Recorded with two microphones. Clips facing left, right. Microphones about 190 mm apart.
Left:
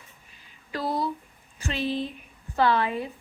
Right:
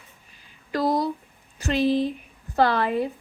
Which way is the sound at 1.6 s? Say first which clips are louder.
Right 7 dB; 40° right (ahead or behind).